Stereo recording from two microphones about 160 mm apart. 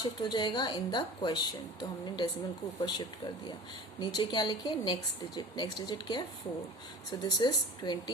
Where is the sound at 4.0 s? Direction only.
25° left (ahead or behind).